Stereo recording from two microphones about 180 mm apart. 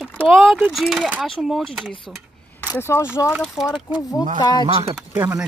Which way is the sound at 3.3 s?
Centre (ahead or behind).